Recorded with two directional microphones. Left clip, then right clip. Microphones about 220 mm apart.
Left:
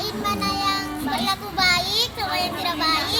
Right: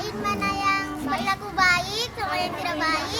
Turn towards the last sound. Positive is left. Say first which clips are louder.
# left 3 dB
turn(degrees=5)  # may be behind; listen again after turning